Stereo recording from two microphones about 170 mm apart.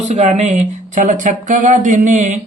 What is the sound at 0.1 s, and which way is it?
Speech, 40° right (ahead or behind).